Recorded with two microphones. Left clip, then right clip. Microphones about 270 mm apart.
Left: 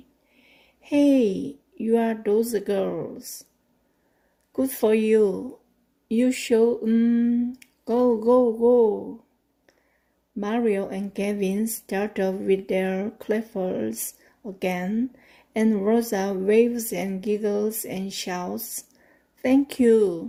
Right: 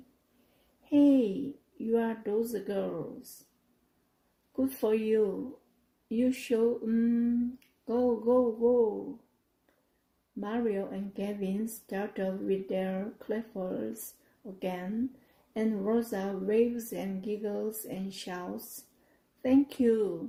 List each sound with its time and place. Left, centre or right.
0.8 s a woman's voice: left
4.5 s speech: left
10.4 s speech: left